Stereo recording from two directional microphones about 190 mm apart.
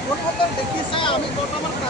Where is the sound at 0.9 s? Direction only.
25° left (ahead or behind).